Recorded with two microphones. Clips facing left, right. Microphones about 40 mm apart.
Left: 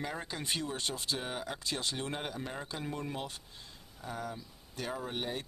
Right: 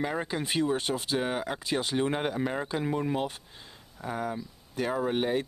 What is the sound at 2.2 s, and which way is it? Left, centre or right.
Speech, right.